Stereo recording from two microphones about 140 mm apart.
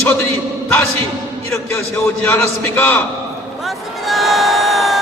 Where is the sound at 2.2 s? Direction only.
15° left (ahead or behind).